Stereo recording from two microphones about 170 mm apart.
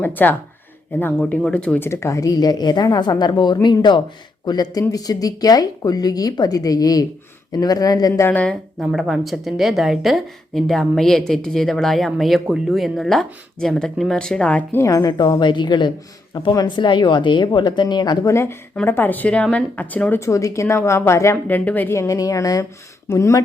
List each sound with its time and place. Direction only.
0.0 s a woman's voice: 10° left (ahead or behind)
8.3 s a woman's voice: 10° left (ahead or behind)